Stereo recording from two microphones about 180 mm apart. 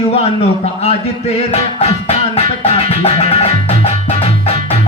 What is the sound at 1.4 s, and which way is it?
Music, 35° left (ahead or behind).